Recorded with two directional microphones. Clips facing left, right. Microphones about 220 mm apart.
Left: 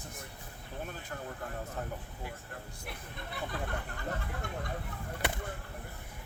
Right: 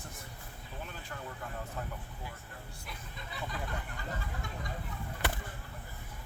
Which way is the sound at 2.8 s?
60° left (ahead or behind).